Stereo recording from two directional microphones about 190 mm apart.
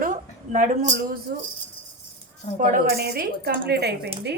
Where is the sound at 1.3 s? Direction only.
55° right (ahead or behind).